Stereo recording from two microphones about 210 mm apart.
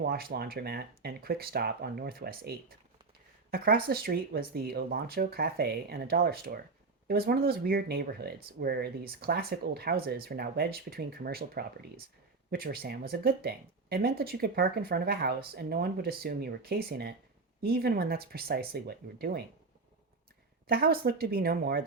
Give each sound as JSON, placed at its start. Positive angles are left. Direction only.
{"t": 0.0, "sound": "speech", "side_deg": -45}
{"t": 20.7, "sound": "speech", "side_deg": -45}